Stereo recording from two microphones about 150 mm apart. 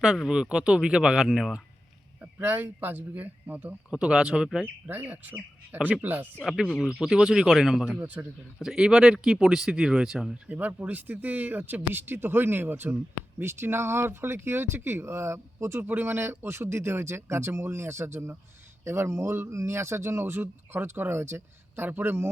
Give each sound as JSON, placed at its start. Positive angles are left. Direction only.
{"t": 0.0, "sound": "speech", "side_deg": -5}
{"t": 6.3, "sound": "speech", "side_deg": 0}